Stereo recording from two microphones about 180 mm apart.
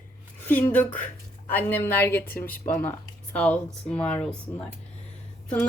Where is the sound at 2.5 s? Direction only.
50° left (ahead or behind).